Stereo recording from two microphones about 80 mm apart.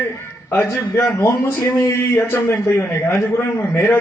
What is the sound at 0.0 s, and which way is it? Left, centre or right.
A man's voice, left.